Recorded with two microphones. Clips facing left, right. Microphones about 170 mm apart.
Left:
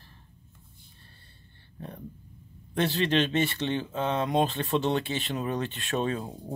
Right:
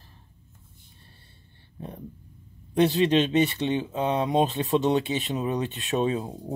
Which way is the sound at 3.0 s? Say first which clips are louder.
Right 4 dB; 15° right (ahead or behind).